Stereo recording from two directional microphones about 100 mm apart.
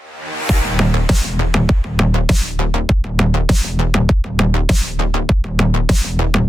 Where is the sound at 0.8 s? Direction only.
Centre (ahead or behind).